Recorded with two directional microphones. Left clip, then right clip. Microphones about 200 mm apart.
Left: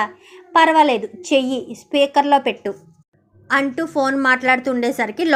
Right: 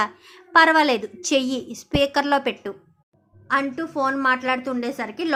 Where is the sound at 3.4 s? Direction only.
20° left (ahead or behind).